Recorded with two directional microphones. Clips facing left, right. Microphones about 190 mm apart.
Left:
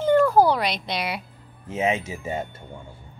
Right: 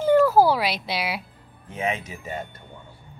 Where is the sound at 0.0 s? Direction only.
5° right (ahead or behind).